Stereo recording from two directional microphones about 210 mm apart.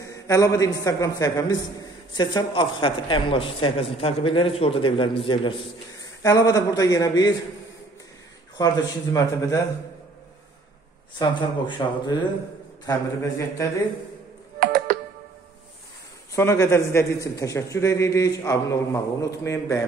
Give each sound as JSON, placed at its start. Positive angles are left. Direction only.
{"t": 0.0, "sound": "a man's voice", "side_deg": 15}
{"t": 8.5, "sound": "a man's voice", "side_deg": 15}
{"t": 11.1, "sound": "a woman's voice", "side_deg": 20}
{"t": 14.6, "sound": "music", "side_deg": -40}
{"t": 16.3, "sound": "a man's voice", "side_deg": 15}